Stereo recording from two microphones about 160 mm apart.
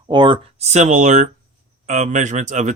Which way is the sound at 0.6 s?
45° right (ahead or behind).